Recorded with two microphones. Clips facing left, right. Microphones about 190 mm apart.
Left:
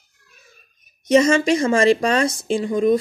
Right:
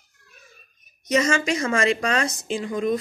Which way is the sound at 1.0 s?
30° left (ahead or behind).